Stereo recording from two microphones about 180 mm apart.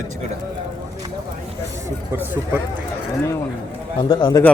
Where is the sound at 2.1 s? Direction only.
10° right (ahead or behind).